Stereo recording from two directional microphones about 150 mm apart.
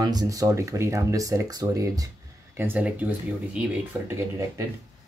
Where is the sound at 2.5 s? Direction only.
10° right (ahead or behind).